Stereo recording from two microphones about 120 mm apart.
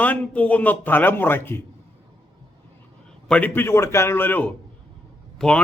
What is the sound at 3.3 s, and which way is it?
A man's voice, 15° left (ahead or behind).